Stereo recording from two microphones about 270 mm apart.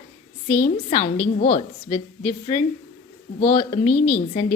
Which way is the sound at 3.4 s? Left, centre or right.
Left.